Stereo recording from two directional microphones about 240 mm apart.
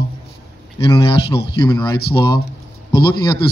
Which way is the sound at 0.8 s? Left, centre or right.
Left.